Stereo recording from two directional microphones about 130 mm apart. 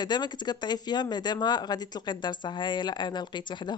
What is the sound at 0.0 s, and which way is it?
Speech, 35° left (ahead or behind).